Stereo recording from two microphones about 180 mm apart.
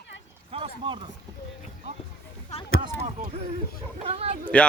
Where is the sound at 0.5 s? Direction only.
30° right (ahead or behind).